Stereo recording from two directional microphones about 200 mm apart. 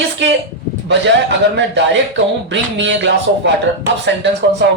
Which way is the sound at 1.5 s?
65° right (ahead or behind).